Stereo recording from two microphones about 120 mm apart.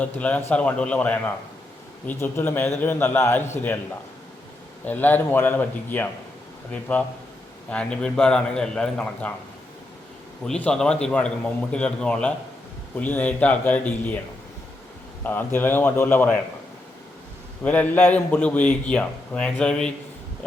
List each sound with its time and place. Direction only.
0.0 s a man's voice: 10° left (ahead or behind)
4.9 s a man's voice: 15° left (ahead or behind)
10.4 s a man's voice: 5° left (ahead or behind)
15.2 s a man's voice: 15° left (ahead or behind)
17.6 s a man's voice: 10° left (ahead or behind)